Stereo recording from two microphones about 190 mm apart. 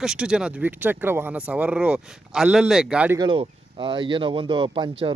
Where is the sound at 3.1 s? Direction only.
25° right (ahead or behind).